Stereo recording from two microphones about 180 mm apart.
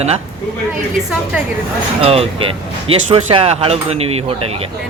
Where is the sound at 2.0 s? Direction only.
35° right (ahead or behind).